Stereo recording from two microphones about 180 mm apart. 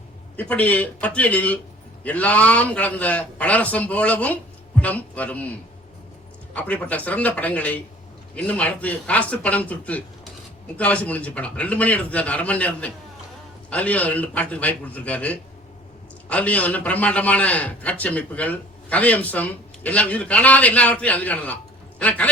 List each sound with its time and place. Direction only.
0.3 s a man's voice: 10° left (ahead or behind)